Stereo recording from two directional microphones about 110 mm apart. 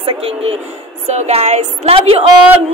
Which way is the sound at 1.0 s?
90° right.